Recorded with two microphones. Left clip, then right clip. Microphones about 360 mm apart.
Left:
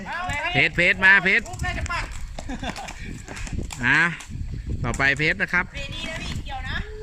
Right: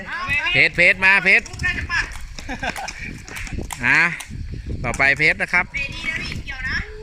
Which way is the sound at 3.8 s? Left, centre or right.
Centre.